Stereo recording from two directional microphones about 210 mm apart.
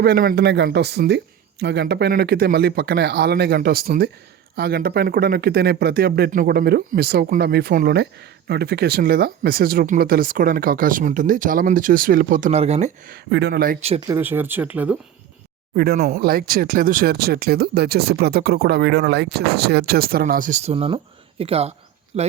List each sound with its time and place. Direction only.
0.0 s speech: 45° right (ahead or behind); by 12.9 s 30° right (ahead or behind)
13.1 s speech: 50° right (ahead or behind)
14.1 s speech: 10° right (ahead or behind)
15.7 s speech: 45° right (ahead or behind)